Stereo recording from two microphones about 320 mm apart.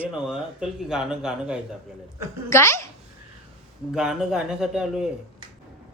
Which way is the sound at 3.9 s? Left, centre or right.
Centre.